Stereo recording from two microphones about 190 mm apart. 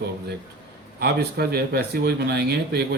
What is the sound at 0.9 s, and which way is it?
Speech, 55° right (ahead or behind).